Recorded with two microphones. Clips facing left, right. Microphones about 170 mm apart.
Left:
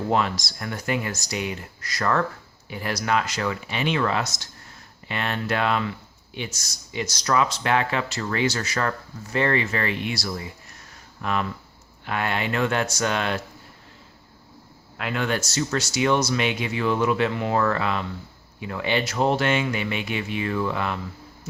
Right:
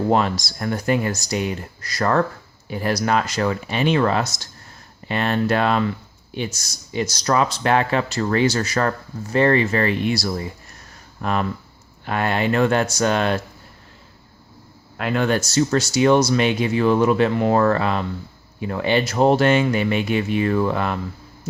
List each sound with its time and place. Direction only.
0.1 s speech: 40° right (ahead or behind)
14.9 s speech: 40° right (ahead or behind)